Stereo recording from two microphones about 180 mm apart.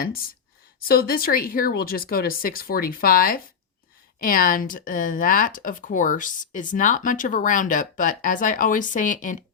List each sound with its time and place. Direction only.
0.0 s speech: 55° left (ahead or behind)